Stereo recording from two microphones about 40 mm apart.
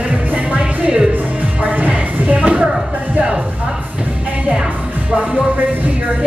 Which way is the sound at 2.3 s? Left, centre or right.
Right.